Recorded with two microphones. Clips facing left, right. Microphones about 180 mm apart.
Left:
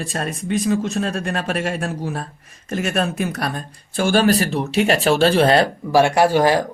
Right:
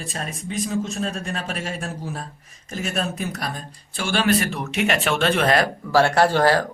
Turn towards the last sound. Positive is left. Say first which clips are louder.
# left 2 dB
turn(degrees=15)  # may be behind; listen again after turning